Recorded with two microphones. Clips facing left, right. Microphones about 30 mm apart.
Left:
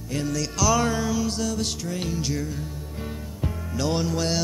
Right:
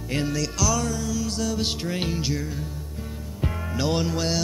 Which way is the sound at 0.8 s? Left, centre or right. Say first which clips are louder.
Left 3 dB; left.